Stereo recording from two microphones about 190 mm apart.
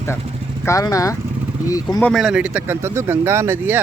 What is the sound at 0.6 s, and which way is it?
Speech, 15° left (ahead or behind).